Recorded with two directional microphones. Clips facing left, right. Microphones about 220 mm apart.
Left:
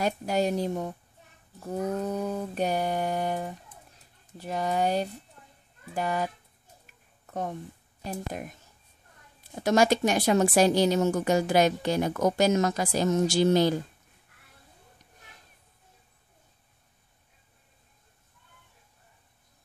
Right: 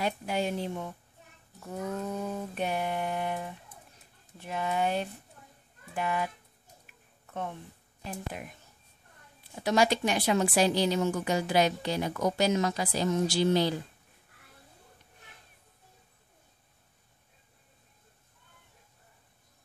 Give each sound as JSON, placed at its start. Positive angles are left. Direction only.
{"t": 0.0, "sound": "mantra", "side_deg": 40}
{"t": 7.2, "sound": "a sound", "side_deg": 40}
{"t": 8.0, "sound": "a woman's voice", "side_deg": 40}